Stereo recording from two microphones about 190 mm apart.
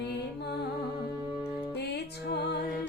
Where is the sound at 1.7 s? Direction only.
60° left (ahead or behind).